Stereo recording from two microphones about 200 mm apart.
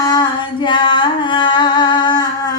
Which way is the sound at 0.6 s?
25° left (ahead or behind).